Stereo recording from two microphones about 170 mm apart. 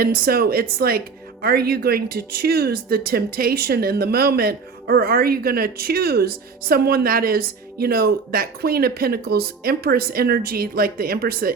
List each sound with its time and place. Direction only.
0.0 s speech: 60° right (ahead or behind)